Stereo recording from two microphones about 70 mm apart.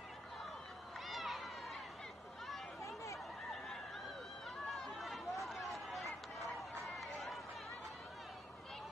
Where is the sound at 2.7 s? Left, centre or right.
Left.